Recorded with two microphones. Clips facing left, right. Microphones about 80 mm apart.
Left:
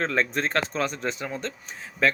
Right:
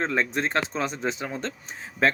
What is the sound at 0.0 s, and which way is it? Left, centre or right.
Speech, centre.